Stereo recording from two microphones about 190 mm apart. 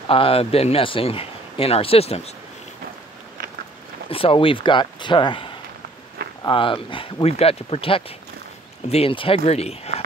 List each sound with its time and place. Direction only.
0.1 s a man's voice: 30° left (ahead or behind)
4.1 s a man's voice: 30° left (ahead or behind)